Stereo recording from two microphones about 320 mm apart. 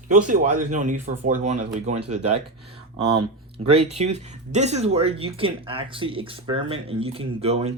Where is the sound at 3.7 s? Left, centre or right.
Centre.